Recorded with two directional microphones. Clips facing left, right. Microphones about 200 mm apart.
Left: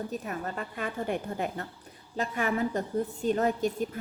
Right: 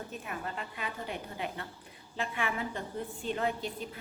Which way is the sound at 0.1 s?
40° left (ahead or behind).